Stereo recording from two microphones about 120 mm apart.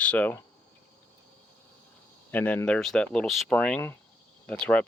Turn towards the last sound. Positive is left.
turn(degrees=10)  # may be behind; listen again after turning